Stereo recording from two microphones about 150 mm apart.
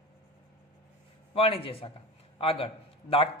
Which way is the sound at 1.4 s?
40° left (ahead or behind).